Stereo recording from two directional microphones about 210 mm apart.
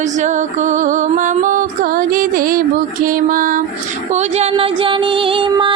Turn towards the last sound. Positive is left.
turn(degrees=-25)  # may be behind; listen again after turning